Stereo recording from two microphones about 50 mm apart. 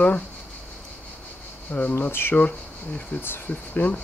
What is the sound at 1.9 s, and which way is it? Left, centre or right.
Speech, left.